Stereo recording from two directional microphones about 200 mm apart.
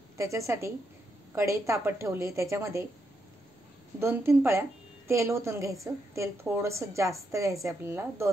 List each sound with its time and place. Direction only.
0.2 s a woman's voice: 15° right (ahead or behind)
4.0 s a woman's voice: 10° right (ahead or behind)